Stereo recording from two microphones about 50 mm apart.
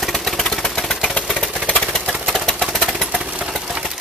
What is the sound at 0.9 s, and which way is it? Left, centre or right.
Engine, centre.